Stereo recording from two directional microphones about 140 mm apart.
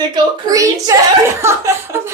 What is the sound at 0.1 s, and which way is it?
Speech, 25° right (ahead or behind).